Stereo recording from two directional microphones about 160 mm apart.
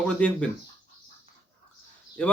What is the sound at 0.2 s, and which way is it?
Speech, 10° left (ahead or behind).